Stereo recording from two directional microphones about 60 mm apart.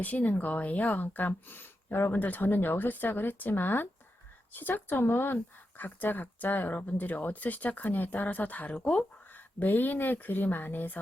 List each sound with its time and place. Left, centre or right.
0.0 s speech: left